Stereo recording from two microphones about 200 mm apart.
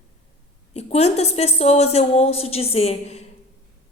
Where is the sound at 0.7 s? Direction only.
35° left (ahead or behind).